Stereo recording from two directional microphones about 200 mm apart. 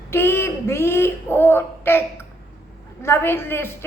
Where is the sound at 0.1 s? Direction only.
10° left (ahead or behind).